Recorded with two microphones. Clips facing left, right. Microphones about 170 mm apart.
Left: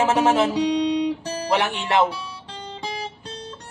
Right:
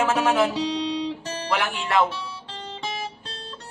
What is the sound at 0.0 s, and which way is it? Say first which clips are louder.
Speech: left 2 dB; 25° left (ahead or behind).